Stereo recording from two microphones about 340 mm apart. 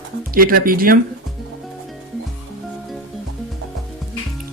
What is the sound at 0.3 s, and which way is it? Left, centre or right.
Speech, right.